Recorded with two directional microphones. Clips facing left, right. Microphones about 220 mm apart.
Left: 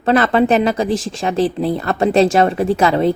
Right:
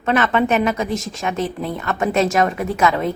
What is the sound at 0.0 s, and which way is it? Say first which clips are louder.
Speech: left 4 dB; 35° left (ahead or behind).